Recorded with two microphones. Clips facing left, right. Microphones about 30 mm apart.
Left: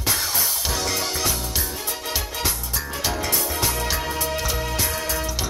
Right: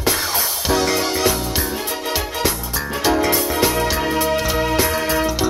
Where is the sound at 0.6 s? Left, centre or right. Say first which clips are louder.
Right 11 dB; right.